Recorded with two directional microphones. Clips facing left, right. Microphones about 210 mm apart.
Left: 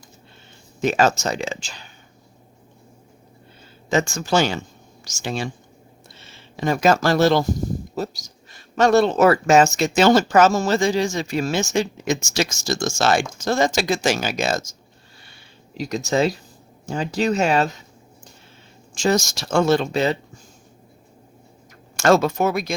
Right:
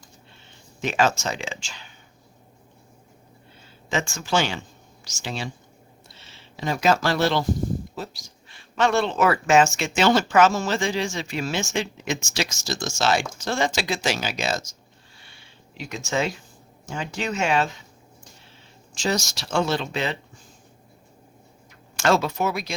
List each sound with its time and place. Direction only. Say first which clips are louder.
0.8 s speech: left 4 dB; 40° left (ahead or behind)
3.8 s speech: left 6 dB; 40° left (ahead or behind)
15.8 s speech: left 6 dB; 40° left (ahead or behind)
18.9 s speech: left 6 dB; 50° left (ahead or behind)
21.9 s speech: left 5 dB; 45° left (ahead or behind)